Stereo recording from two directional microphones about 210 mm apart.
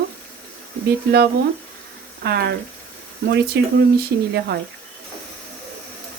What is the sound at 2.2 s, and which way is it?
Speech, 50° right (ahead or behind).